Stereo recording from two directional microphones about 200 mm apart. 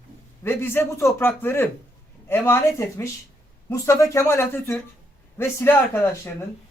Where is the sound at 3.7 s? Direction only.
15° left (ahead or behind).